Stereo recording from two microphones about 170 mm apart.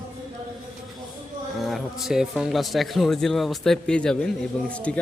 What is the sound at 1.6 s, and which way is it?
Speech, centre (ahead or behind).